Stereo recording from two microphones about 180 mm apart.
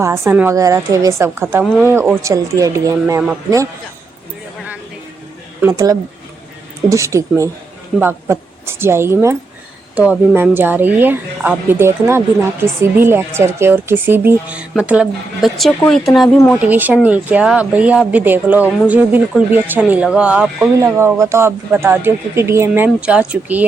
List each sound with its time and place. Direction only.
0.0 s speech: 10° right (ahead or behind)
5.6 s speech: 20° right (ahead or behind)
20.7 s speech: 15° right (ahead or behind)